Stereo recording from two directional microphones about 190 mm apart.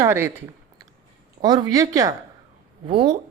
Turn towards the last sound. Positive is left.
turn(degrees=-25)  # may be behind; listen again after turning